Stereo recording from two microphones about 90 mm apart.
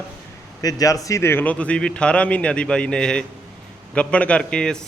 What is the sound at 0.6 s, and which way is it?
Speech, 40° left (ahead or behind).